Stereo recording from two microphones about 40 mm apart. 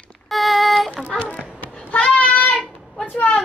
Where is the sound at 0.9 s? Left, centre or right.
Left.